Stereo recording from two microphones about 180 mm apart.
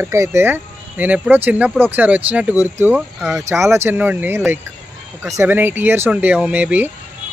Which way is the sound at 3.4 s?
15° right (ahead or behind).